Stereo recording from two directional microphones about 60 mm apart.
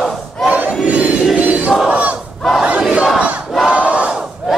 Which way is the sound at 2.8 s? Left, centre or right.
Centre.